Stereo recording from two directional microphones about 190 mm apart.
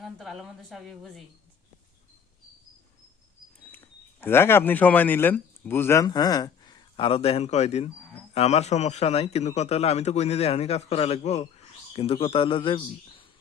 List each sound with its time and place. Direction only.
0.0 s a woman's voice: centre (ahead or behind)
3.6 s a man's voice: 10° left (ahead or behind); by 13.2 s 25° left (ahead or behind)